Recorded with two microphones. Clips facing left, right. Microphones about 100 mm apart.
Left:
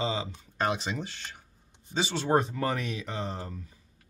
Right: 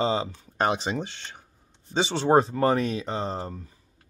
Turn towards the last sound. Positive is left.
turn(degrees=-35)  # may be behind; listen again after turning